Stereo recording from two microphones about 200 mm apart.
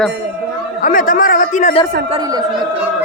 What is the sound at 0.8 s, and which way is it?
A man's voice, 40° left (ahead or behind).